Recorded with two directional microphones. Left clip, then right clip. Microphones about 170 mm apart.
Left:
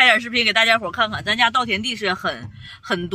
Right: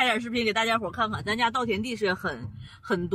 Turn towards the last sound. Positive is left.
turn(degrees=0)  # may be behind; listen again after turning